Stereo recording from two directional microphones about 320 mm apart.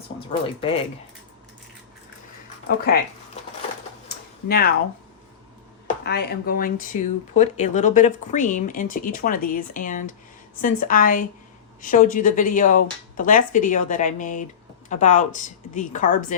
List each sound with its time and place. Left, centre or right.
0.2 s speech: centre
4.4 s speech: left
6.0 s speech: left